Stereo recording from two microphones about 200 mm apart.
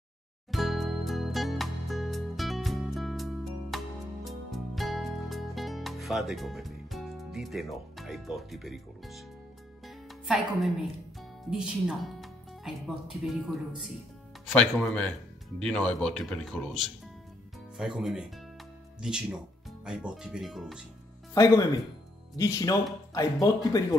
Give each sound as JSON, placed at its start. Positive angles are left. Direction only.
{"t": 0.5, "sound": "music", "side_deg": 0}
{"t": 9.8, "sound": "speech", "side_deg": 0}
{"t": 22.4, "sound": "speech", "side_deg": 15}